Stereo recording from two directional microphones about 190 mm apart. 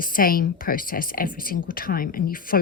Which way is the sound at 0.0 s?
50° left (ahead or behind).